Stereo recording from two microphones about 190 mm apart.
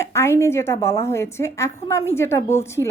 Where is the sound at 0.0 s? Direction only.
15° left (ahead or behind).